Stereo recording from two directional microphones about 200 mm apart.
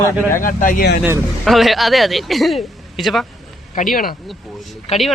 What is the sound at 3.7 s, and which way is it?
Speech, 45° left (ahead or behind).